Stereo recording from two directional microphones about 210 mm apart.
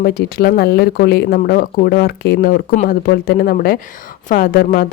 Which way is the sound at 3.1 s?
45° left (ahead or behind).